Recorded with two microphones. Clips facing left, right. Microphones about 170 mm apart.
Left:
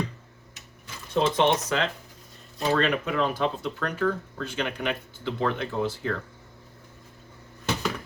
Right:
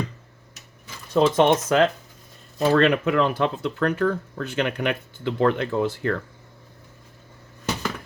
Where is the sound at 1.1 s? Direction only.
45° right (ahead or behind).